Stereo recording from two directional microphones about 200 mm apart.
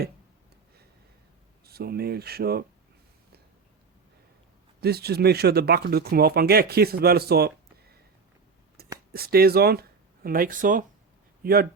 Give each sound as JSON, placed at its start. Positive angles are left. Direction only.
{"t": 1.6, "sound": "speech", "side_deg": -50}
{"t": 4.8, "sound": "speech", "side_deg": -50}
{"t": 8.8, "sound": "a sound", "side_deg": -50}
{"t": 9.1, "sound": "speech", "side_deg": -50}